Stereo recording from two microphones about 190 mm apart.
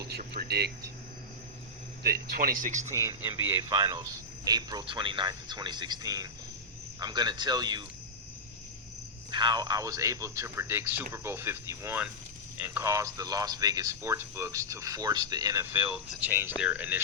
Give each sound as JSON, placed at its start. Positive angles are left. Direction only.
{"t": 0.0, "sound": "speech", "side_deg": -55}
{"t": 2.0, "sound": "speech", "side_deg": -55}
{"t": 2.9, "sound": "speech", "side_deg": -15}
{"t": 9.3, "sound": "speech", "side_deg": -25}